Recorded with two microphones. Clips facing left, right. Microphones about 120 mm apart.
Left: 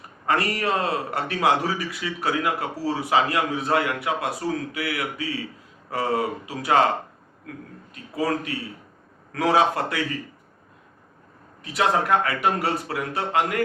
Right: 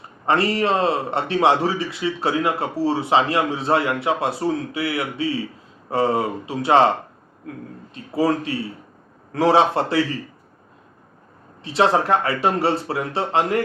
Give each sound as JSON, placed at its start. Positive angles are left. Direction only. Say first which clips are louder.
{"t": 0.3, "sound": "a man's voice", "louder": "right 4 dB", "side_deg": -25}
{"t": 11.6, "sound": "a man's voice", "louder": "right 4 dB", "side_deg": -30}